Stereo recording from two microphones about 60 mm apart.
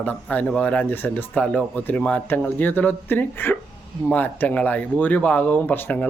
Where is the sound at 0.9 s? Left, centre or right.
Left.